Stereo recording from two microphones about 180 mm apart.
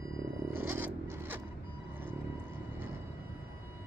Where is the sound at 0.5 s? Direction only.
10° right (ahead or behind).